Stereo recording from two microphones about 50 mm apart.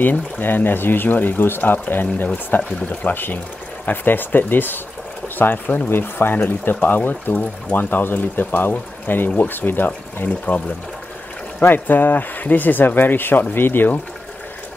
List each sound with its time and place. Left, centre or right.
0.0 s speech: left
11.6 s speech: left